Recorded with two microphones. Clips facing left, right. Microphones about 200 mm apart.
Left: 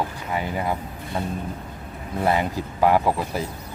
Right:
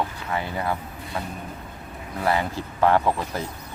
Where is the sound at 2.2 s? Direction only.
20° left (ahead or behind).